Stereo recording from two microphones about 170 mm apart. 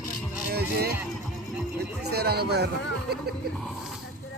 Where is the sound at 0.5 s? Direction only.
65° right (ahead or behind).